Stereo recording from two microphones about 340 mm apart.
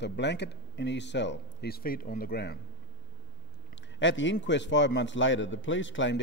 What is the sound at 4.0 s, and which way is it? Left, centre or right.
A man's voice, left.